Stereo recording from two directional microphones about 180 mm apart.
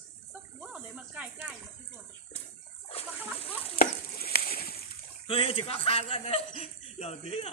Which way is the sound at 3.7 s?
60° left (ahead or behind).